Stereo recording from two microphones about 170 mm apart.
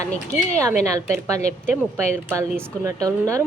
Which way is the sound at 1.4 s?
40° left (ahead or behind).